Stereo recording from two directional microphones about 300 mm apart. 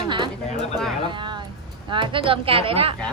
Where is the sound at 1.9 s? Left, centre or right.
Centre.